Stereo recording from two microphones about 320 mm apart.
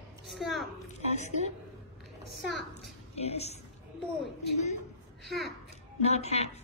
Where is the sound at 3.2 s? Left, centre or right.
Centre.